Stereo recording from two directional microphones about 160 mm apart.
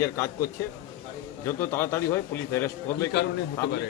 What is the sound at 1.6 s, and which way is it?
A man's voice, 15° left (ahead or behind).